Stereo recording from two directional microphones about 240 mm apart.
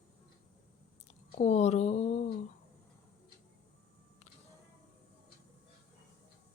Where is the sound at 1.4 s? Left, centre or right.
Left.